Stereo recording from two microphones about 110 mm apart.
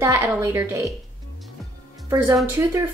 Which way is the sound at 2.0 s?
25° right (ahead or behind).